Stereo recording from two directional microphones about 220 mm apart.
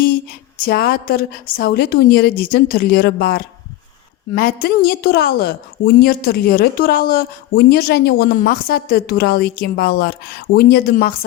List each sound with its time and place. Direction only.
0.6 s a woman's voice: 45° left (ahead or behind)